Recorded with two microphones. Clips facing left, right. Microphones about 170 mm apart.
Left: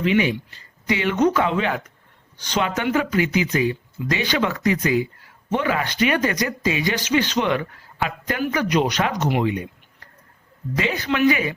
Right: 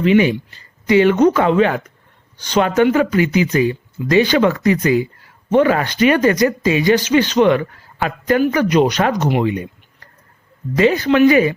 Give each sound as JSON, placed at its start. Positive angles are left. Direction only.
{"t": 0.0, "sound": "speech", "side_deg": -40}
{"t": 10.8, "sound": "speech", "side_deg": -40}